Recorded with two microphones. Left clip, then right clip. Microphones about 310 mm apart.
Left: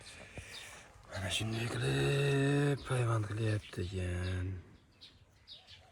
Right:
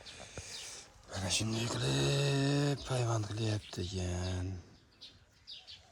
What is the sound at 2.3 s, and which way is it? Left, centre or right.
Speech, centre.